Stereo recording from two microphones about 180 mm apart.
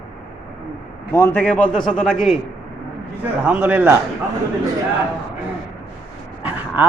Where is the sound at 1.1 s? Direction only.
15° left (ahead or behind).